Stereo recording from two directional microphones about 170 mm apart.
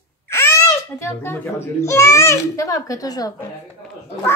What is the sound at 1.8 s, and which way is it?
A woman's voice, 15° left (ahead or behind).